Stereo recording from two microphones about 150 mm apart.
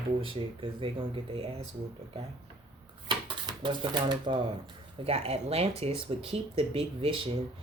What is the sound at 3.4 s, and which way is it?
Speech, 30° right (ahead or behind).